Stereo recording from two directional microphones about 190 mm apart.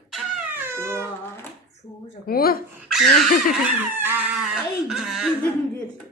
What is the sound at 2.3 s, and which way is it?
Speech, 50° left (ahead or behind).